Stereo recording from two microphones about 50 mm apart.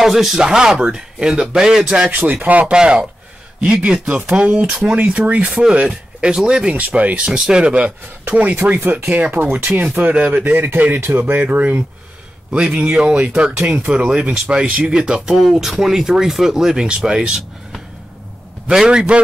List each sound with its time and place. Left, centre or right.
0.0 s speech: centre
2.0 s speech: right
2.6 s speech: centre; by 10.5 s right
10.5 s speech: right
12.8 s speech: right
15.0 s speech: centre
18.7 s speech: centre